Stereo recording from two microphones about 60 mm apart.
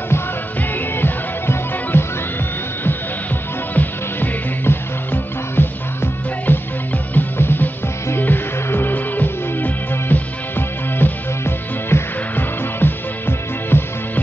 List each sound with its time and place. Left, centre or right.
0.6 s music: left
3.7 s music: left